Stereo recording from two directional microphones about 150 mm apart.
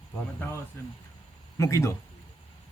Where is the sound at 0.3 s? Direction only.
15° left (ahead or behind).